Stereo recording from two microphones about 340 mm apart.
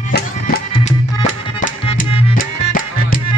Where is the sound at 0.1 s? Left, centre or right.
Left.